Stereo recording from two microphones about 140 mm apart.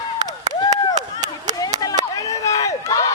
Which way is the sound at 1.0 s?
55° right (ahead or behind).